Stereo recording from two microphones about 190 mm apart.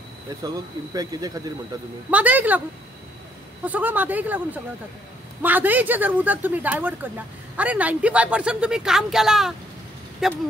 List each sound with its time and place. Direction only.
0.4 s speech: 20° right (ahead or behind)
2.0 s speech: 10° right (ahead or behind)
3.6 s speech: 10° right (ahead or behind)
5.4 s speech: 10° right (ahead or behind)